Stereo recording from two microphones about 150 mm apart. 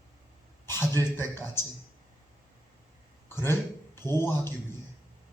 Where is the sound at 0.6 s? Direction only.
15° left (ahead or behind).